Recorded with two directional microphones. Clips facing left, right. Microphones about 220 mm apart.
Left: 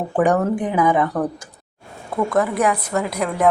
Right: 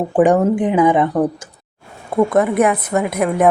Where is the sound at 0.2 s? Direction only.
20° right (ahead or behind).